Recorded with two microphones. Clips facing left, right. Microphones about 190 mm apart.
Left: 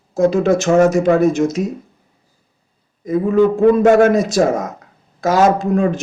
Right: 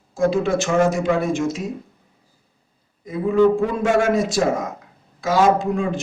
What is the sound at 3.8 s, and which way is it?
Speech, 60° left (ahead or behind).